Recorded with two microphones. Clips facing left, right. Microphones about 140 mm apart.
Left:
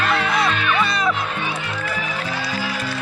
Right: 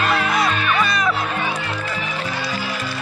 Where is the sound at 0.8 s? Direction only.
25° left (ahead or behind).